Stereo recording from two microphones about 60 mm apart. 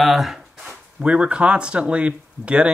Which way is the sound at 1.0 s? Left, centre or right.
Centre.